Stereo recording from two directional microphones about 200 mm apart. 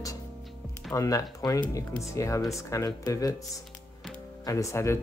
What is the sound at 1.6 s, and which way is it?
Speech, 5° left (ahead or behind).